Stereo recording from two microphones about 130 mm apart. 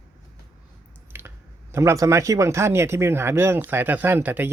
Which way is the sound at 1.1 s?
20° right (ahead or behind).